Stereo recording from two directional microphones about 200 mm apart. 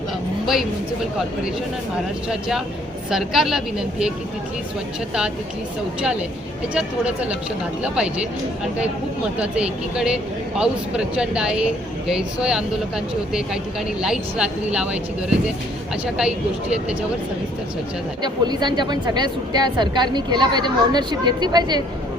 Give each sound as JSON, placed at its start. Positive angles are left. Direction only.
{"t": 2.3, "sound": "speech", "side_deg": 0}
{"t": 6.0, "sound": "speech", "side_deg": -5}
{"t": 9.4, "sound": "speech", "side_deg": -5}
{"t": 18.2, "sound": "a woman's voice", "side_deg": -20}